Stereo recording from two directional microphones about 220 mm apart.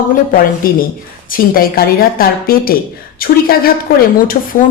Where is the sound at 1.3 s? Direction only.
40° left (ahead or behind).